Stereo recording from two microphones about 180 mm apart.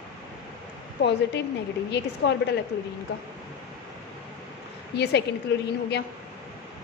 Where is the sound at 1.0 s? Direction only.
75° left (ahead or behind).